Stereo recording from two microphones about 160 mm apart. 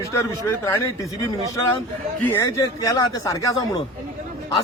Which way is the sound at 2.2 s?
15° left (ahead or behind).